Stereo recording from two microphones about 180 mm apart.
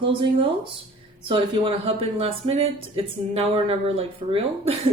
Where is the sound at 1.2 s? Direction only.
30° right (ahead or behind).